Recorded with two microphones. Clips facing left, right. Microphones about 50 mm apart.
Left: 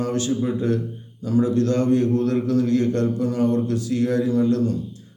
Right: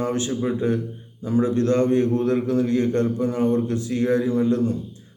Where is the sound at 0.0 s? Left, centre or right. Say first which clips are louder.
Left 1 dB; right.